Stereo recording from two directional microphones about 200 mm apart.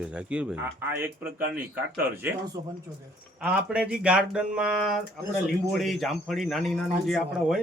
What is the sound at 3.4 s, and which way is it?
Speech, 5° right (ahead or behind).